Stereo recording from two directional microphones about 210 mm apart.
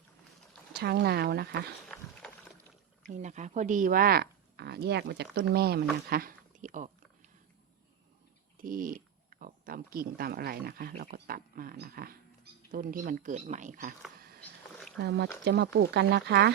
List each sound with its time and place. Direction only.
0.7 s speech: 50° right (ahead or behind)
1.9 s a sound: 5° left (ahead or behind)
3.1 s speech: 35° right (ahead or behind)
8.5 s speech: 40° right (ahead or behind)
15.0 s speech: 55° right (ahead or behind)